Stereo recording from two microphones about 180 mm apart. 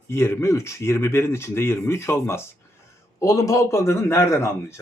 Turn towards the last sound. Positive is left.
turn(degrees=15)  # may be behind; listen again after turning